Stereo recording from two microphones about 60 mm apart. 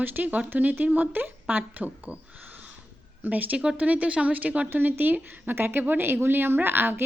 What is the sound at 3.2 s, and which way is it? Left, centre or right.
Speech, right.